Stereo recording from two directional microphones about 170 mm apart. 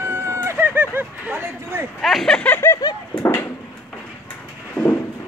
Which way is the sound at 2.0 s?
Centre (ahead or behind).